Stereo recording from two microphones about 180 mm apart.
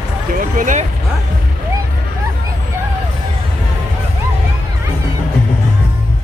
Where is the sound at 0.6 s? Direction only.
45° right (ahead or behind).